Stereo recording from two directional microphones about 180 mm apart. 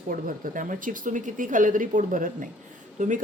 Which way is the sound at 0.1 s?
50° right (ahead or behind).